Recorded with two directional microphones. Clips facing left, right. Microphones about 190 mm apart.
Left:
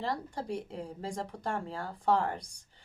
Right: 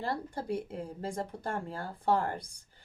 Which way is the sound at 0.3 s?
Centre (ahead or behind).